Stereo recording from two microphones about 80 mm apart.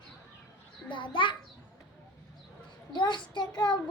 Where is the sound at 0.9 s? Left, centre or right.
Left.